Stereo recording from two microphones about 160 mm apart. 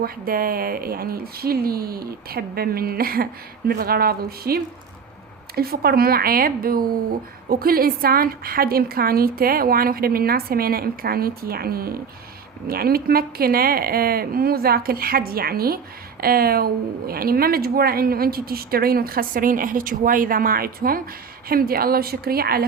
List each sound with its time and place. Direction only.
0.0 s a woman's voice: 65° right (ahead or behind)